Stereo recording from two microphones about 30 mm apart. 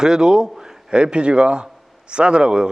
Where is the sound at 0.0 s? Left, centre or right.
Centre.